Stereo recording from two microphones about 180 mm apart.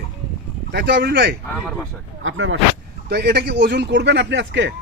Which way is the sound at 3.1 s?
65° right (ahead or behind).